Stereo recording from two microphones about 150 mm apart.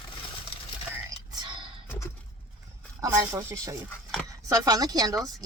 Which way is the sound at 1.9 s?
15° left (ahead or behind).